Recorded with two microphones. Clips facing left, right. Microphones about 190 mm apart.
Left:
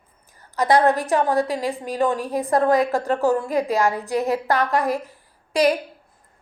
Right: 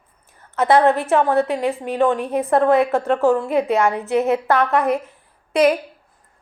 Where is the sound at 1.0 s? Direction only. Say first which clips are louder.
Right 3 dB; 35° left (ahead or behind).